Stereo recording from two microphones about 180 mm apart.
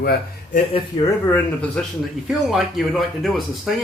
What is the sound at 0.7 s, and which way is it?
Speech, 30° left (ahead or behind).